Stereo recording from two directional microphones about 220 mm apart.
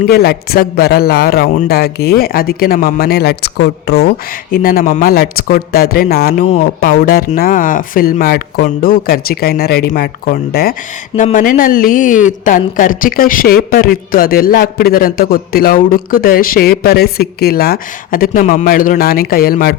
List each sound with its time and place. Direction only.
0.0 s a man's voice: 45° left (ahead or behind)